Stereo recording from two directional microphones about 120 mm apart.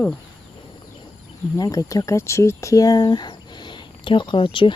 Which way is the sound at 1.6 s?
30° left (ahead or behind).